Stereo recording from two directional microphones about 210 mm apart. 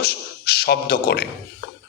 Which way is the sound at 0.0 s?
50° left (ahead or behind).